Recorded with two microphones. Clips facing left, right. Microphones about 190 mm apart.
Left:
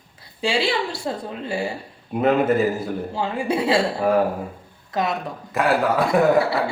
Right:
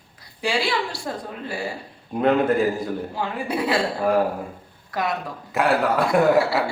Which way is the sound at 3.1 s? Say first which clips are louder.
Left 5 dB; 25° left (ahead or behind).